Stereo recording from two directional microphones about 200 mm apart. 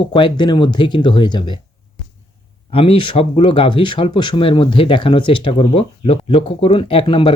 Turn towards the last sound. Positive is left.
turn(degrees=25)  # may be behind; listen again after turning